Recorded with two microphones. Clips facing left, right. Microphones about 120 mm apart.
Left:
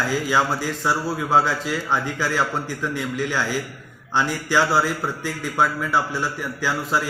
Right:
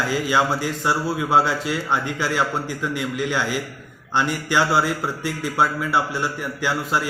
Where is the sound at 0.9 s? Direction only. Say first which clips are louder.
Right 1 dB; 5° right (ahead or behind).